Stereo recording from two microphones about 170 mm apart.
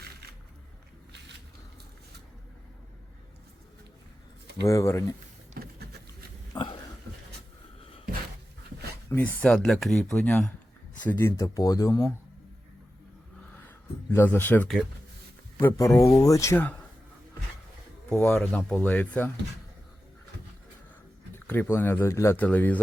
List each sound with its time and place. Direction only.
4.6 s speech: 15° left (ahead or behind)
5.6 s boat: 60° right (ahead or behind)
6.5 s a sound: 25° left (ahead or behind)
9.0 s speech: 10° left (ahead or behind)
13.5 s a sound: 10° left (ahead or behind)
15.6 s speech: 20° left (ahead or behind)
18.1 s speech: 5° left (ahead or behind)
21.3 s speech: 10° left (ahead or behind)